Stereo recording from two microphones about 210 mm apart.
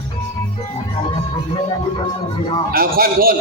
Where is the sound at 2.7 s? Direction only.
45° right (ahead or behind).